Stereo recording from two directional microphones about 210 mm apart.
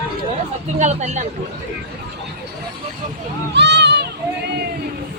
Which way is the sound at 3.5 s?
55° right (ahead or behind).